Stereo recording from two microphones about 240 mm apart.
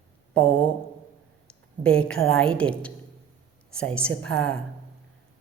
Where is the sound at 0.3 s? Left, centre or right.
Centre.